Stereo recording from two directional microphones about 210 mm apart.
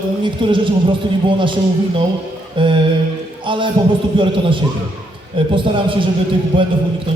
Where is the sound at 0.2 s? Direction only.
25° right (ahead or behind).